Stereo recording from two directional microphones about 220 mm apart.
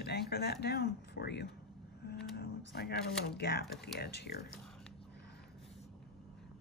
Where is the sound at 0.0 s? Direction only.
45° left (ahead or behind).